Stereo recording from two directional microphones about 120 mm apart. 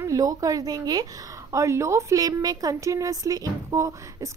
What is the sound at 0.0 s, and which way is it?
A woman's voice, 30° right (ahead or behind).